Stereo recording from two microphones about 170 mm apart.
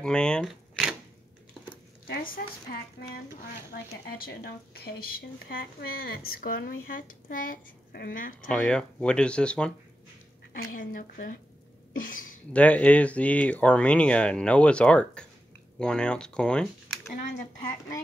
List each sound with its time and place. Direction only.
0.0 s a sound: 5° left (ahead or behind)
2.0 s a woman's voice: 55° left (ahead or behind)
8.5 s speech: 5° left (ahead or behind)
10.5 s speech: 55° left (ahead or behind)
11.9 s a sound: 55° left (ahead or behind)
12.5 s speech: 10° left (ahead or behind)